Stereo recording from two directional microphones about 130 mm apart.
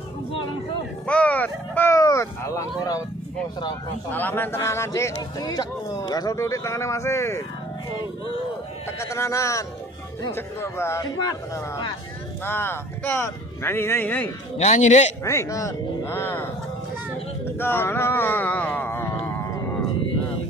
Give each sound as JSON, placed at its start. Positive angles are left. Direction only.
{"t": 1.0, "sound": "speech", "side_deg": 10}
{"t": 4.1, "sound": "speech", "side_deg": 15}
{"t": 9.0, "sound": "speech", "side_deg": 20}
{"t": 14.6, "sound": "a man's voice", "side_deg": 60}
{"t": 15.2, "sound": "speech", "side_deg": 25}
{"t": 17.5, "sound": "speech", "side_deg": 15}